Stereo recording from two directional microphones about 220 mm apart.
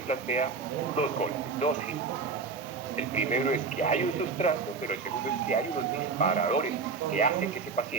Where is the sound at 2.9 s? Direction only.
35° left (ahead or behind).